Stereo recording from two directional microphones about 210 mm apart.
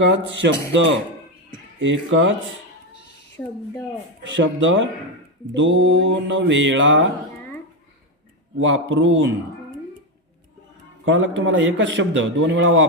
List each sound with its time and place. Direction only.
0.0 s a man's voice: 60° right (ahead or behind)
1.8 s a man's voice: 65° right (ahead or behind)
4.2 s a man's voice: 60° right (ahead or behind)
8.5 s a man's voice: 65° right (ahead or behind)
11.0 s a man's voice: 65° right (ahead or behind)